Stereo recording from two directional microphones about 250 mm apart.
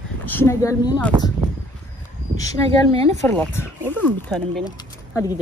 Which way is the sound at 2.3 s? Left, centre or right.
Centre.